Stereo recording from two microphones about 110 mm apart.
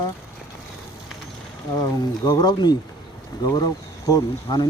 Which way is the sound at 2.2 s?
40° left (ahead or behind).